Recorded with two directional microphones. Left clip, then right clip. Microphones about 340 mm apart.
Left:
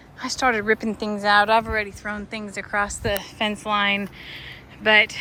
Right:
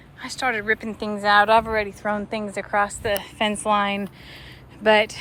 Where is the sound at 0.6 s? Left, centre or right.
Centre.